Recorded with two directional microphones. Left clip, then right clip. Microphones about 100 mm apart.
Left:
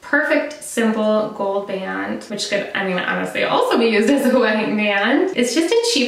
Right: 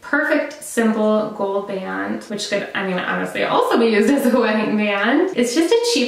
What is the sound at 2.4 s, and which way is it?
Speech, centre (ahead or behind).